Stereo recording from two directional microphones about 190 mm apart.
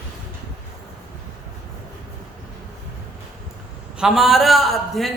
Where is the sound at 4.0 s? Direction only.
5° right (ahead or behind).